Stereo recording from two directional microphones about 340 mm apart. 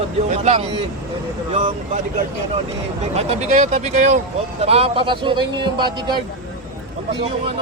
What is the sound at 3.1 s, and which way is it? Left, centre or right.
Speech, centre.